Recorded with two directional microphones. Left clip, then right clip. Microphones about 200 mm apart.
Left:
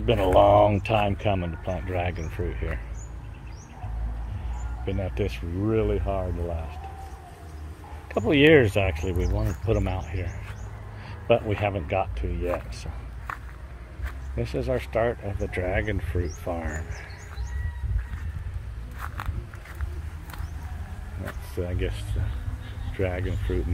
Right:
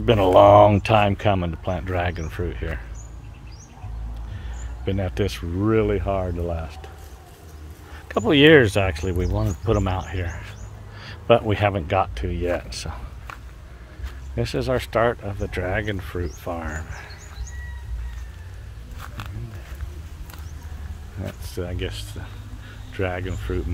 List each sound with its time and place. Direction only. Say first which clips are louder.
0.0 s speech: right 5 dB; 40° right (ahead or behind)
4.8 s speech: right 4 dB; 35° right (ahead or behind)
8.1 s speech: right 4 dB; 30° right (ahead or behind)
14.3 s speech: right 4 dB; 35° right (ahead or behind)
15.2 s speech: right 2 dB; 20° right (ahead or behind)
21.5 s speech: right 1 dB; 20° right (ahead or behind)